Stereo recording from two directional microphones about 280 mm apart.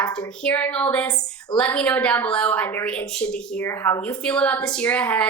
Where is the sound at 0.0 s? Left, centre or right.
Centre.